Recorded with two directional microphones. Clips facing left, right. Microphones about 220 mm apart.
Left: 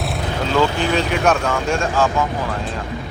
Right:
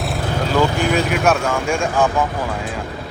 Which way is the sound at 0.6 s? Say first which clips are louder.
Right 1 dB; 10° right (ahead or behind).